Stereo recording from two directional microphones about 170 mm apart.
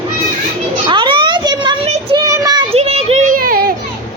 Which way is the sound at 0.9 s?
30° right (ahead or behind).